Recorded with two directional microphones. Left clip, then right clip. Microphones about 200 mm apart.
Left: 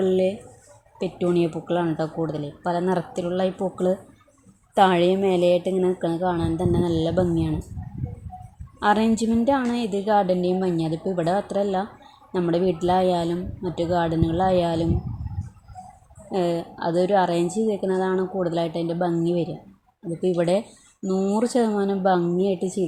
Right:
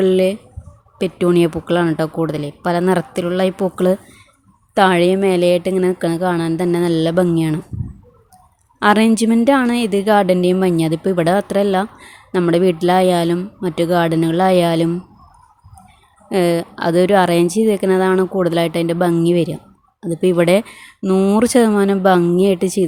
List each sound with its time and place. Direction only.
0.0 s a woman's voice: 20° right (ahead or behind)
8.8 s a woman's voice: 25° right (ahead or behind)
16.3 s a woman's voice: 25° right (ahead or behind)